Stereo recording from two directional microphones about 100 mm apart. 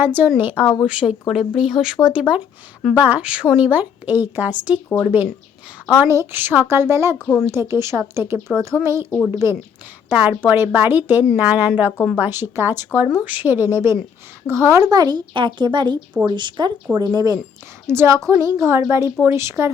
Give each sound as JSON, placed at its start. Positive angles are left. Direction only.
{"t": 0.0, "sound": "a woman's voice", "side_deg": -20}
{"t": 9.0, "sound": "a woman's voice", "side_deg": 15}
{"t": 9.3, "sound": "a woman's voice", "side_deg": -30}
{"t": 10.2, "sound": "a woman's voice", "side_deg": -15}
{"t": 17.8, "sound": "a woman's voice", "side_deg": -25}